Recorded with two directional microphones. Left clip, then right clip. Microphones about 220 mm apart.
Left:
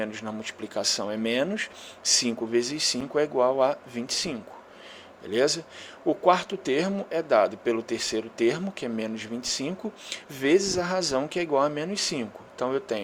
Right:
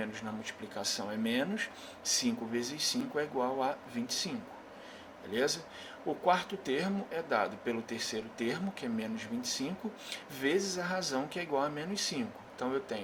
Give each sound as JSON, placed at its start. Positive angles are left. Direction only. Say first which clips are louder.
{"t": 0.0, "sound": "speech", "louder": "left 7 dB", "side_deg": 40}